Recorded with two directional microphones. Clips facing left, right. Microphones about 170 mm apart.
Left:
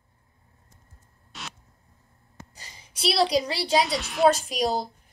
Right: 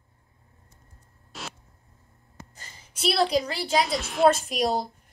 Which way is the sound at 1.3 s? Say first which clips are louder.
Right 2 dB; centre (ahead or behind).